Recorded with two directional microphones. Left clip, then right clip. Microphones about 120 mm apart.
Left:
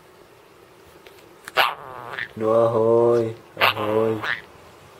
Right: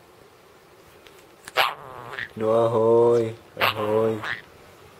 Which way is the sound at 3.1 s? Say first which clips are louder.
Left 1 dB; centre (ahead or behind).